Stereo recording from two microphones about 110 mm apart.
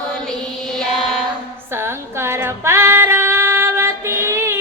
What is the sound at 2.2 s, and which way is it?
Female singing, 25° right (ahead or behind).